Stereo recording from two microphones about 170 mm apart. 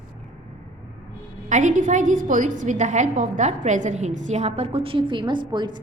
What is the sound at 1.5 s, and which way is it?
A woman's voice, 45° right (ahead or behind).